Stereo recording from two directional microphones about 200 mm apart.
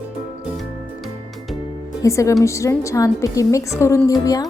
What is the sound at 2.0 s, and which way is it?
A woman's voice, 15° left (ahead or behind).